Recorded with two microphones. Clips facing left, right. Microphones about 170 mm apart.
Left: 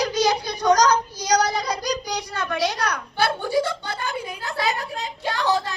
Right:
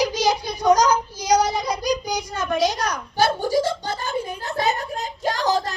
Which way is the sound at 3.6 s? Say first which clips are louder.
Right 2 dB; 40° right (ahead or behind).